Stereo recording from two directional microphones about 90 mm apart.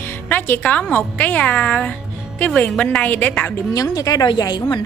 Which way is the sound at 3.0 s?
20° left (ahead or behind).